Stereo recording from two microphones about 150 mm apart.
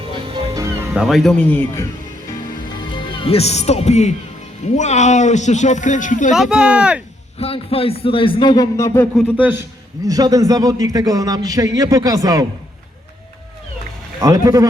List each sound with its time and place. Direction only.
0.1 s music: 30° right (ahead or behind)
0.9 s speech: centre (ahead or behind); by 1.9 s 15° left (ahead or behind)
2.9 s speech: 30° left (ahead or behind); by 6.3 s 55° left (ahead or behind)
6.3 s speech: 5° right (ahead or behind)
7.3 s a man's voice: 40° left (ahead or behind); by 9.0 s 20° left (ahead or behind)
9.4 s speech: 15° right (ahead or behind)
10.1 s a man's voice: 25° right (ahead or behind)
14.2 s a man's voice: 20° right (ahead or behind)